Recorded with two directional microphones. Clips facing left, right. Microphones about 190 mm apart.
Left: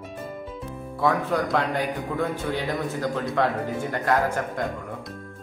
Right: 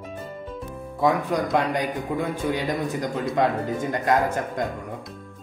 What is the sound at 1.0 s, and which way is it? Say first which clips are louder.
A man's voice: right 1 dB; 15° right (ahead or behind).